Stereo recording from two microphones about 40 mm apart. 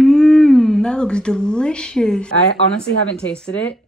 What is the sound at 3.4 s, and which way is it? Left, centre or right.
Speech, left.